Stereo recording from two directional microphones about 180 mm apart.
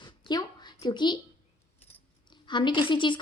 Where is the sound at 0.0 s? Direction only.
25° left (ahead or behind).